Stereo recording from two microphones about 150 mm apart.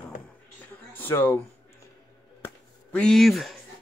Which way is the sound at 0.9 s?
15° left (ahead or behind).